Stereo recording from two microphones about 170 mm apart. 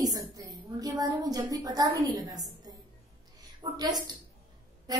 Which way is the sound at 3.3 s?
20° right (ahead or behind).